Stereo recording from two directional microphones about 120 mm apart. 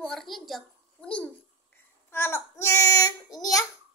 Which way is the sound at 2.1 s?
20° left (ahead or behind).